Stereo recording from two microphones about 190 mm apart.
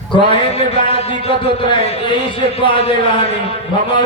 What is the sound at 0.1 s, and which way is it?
A man's voice, 25° left (ahead or behind).